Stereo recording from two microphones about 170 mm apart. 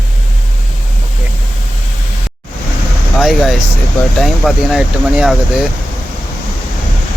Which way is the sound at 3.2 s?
Centre (ahead or behind).